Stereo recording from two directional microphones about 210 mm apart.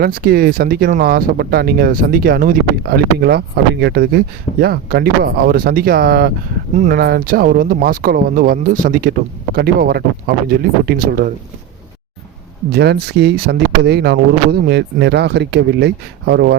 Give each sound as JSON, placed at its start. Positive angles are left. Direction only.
{"t": 0.0, "sound": "speech", "side_deg": -45}
{"t": 12.7, "sound": "speech", "side_deg": -50}